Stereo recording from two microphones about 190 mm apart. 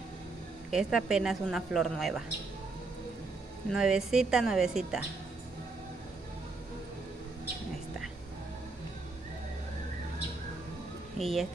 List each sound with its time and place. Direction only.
0.7 s speech: 5° right (ahead or behind)
3.7 s speech: 5° right (ahead or behind)
11.1 s speech: centre (ahead or behind)